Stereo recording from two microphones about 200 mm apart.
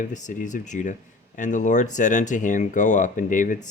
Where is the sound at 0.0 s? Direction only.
40° left (ahead or behind).